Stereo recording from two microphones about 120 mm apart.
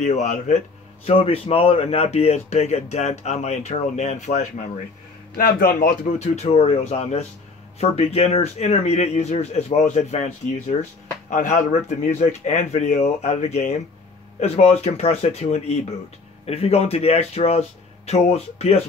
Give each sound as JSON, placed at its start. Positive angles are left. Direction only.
{"t": 0.0, "sound": "speech", "side_deg": 80}
{"t": 1.0, "sound": "speech", "side_deg": 55}
{"t": 5.9, "sound": "speech", "side_deg": 65}
{"t": 10.8, "sound": "speech", "side_deg": 90}